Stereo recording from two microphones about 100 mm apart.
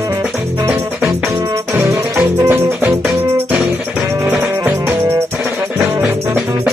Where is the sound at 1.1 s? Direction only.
35° right (ahead or behind).